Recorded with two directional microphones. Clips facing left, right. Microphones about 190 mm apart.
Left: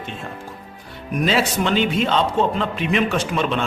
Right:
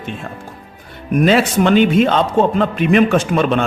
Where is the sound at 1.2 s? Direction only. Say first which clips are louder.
Right 6 dB; 55° right (ahead or behind).